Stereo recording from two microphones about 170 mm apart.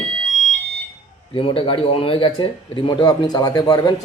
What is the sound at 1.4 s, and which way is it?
Speech, 30° left (ahead or behind).